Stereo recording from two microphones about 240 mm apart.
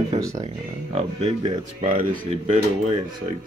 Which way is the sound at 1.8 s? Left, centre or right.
Right.